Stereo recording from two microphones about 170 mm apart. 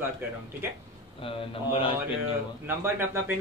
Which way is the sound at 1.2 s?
35° left (ahead or behind).